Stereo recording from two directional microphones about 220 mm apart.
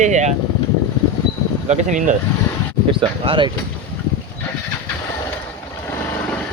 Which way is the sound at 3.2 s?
25° right (ahead or behind).